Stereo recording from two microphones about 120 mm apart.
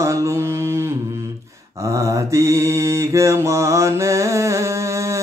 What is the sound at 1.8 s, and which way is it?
Mantra, 25° right (ahead or behind).